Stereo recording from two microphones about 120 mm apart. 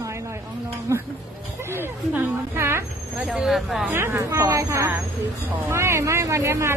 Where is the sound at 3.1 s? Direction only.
5° right (ahead or behind).